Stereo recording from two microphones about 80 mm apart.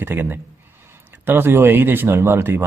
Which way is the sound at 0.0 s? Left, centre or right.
Right.